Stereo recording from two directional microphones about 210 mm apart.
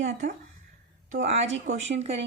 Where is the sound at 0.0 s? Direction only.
35° right (ahead or behind).